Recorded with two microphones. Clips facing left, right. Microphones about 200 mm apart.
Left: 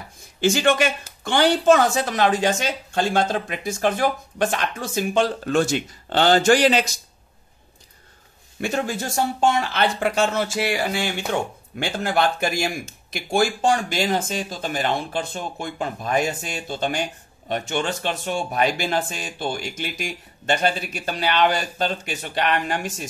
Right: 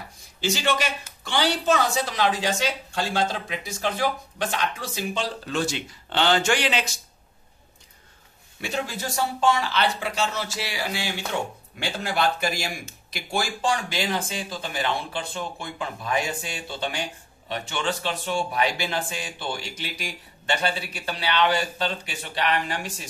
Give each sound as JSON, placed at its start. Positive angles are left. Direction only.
{"t": 0.4, "sound": "a woman's voice", "side_deg": 50}
{"t": 8.5, "sound": "a woman's voice", "side_deg": 50}